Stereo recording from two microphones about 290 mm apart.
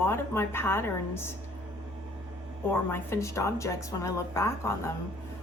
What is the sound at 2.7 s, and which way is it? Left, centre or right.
A woman's voice, centre.